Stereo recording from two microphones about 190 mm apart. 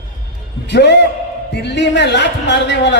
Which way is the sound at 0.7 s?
60° left (ahead or behind).